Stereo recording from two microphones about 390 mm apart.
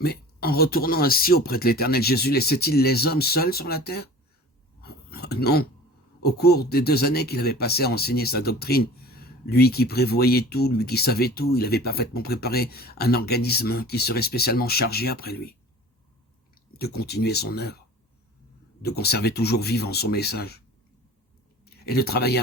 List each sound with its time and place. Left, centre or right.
0.0 s speech: left
4.8 s a sound: left
6.2 s speech: left
16.7 s speech: left
18.8 s speech: left
21.6 s speech: left